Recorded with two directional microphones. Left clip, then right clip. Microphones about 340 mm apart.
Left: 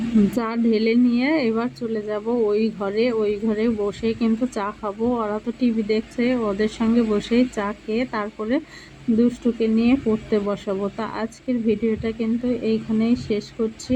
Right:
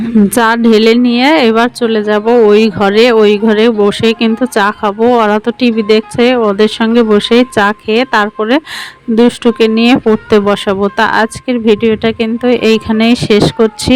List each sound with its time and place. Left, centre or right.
0.3 s speech: right